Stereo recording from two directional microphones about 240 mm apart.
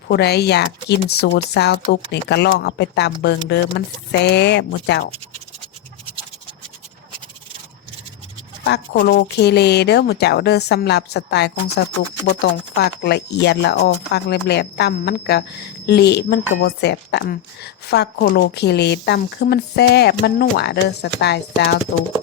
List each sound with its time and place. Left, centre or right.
0.1 s speech: left
8.6 s speech: left